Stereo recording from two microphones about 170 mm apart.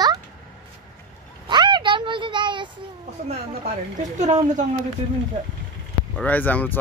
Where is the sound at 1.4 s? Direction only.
25° right (ahead or behind).